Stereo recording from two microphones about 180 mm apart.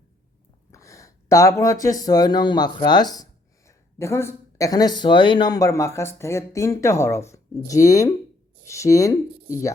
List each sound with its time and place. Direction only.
0.7 s speech: 20° left (ahead or behind)